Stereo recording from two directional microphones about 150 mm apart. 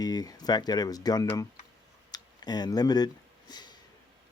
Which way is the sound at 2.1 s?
25° left (ahead or behind).